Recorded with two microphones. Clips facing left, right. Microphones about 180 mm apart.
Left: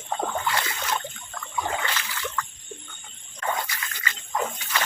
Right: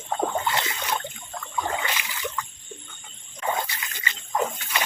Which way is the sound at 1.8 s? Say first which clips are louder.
Even; 15° right (ahead or behind).